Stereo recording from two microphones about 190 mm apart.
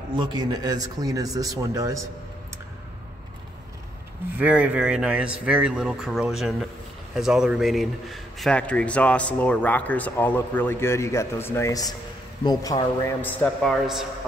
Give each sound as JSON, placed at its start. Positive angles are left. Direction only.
{"t": 0.1, "sound": "a man's voice", "side_deg": -25}
{"t": 4.4, "sound": "a man's voice", "side_deg": -5}
{"t": 13.2, "sound": "speech", "side_deg": 10}